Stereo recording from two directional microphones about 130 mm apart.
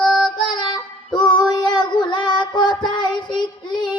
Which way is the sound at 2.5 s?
35° left (ahead or behind).